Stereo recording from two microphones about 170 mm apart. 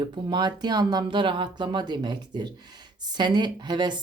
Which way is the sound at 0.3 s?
25° right (ahead or behind).